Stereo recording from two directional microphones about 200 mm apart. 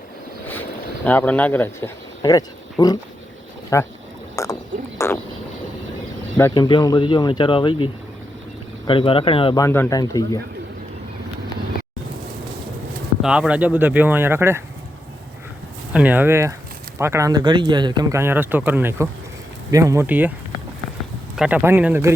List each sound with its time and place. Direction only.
1.0 s speech: 10° left (ahead or behind)
4.4 s frog: 15° left (ahead or behind)
4.9 s a sound: 10° left (ahead or behind)
6.5 s speech: 20° left (ahead or behind)
8.9 s speech: 25° left (ahead or behind)
9.6 s speech: 10° left (ahead or behind)
13.2 s speech: 5° right (ahead or behind)
15.9 s speech: 5° right (ahead or behind)
21.3 s speech: 5° right (ahead or behind)